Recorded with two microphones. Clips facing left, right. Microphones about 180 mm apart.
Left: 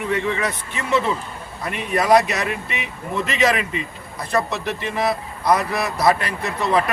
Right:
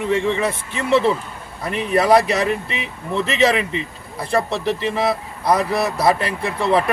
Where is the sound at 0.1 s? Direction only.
25° right (ahead or behind).